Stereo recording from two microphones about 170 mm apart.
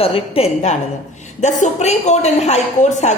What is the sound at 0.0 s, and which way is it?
A woman's voice, 35° left (ahead or behind).